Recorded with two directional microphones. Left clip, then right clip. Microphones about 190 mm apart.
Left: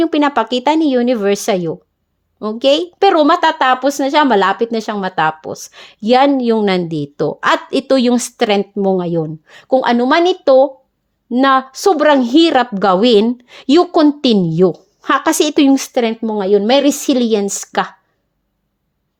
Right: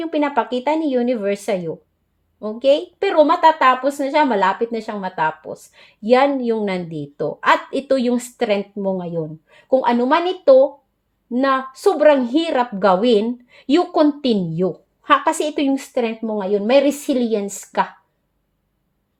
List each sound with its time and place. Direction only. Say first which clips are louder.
0.0 s a woman's voice: left 6 dB; 55° left (ahead or behind)